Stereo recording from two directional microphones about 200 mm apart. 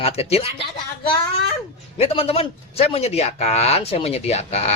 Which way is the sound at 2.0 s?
30° left (ahead or behind).